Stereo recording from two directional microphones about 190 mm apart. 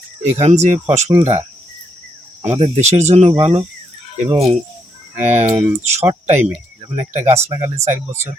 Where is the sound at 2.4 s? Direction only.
30° right (ahead or behind).